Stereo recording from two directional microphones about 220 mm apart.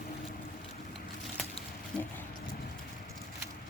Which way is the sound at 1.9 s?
5° left (ahead or behind).